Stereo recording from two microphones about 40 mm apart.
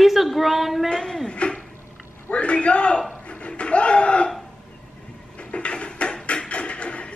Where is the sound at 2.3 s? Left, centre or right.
Left.